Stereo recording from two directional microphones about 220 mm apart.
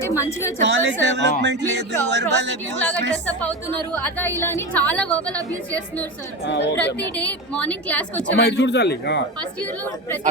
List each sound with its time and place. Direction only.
0.1 s a woman's voice: 15° left (ahead or behind)
0.7 s speech: 55° right (ahead or behind)
3.9 s a woman's voice: 10° left (ahead or behind)
5.4 s a woman's voice: 15° right (ahead or behind)
6.4 s a man's voice: 50° left (ahead or behind)
6.7 s a woman's voice: 5° left (ahead or behind)
8.4 s a man's voice: 50° left (ahead or behind)
9.4 s a woman's voice: 5° left (ahead or behind)